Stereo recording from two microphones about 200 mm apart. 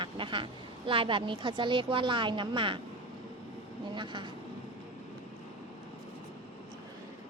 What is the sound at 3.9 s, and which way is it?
Speech, 25° right (ahead or behind).